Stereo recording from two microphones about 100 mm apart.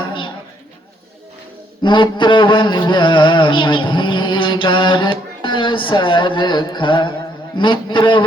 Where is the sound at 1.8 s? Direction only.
55° left (ahead or behind).